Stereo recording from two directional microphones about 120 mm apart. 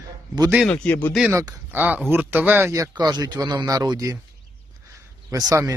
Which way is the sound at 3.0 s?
35° right (ahead or behind).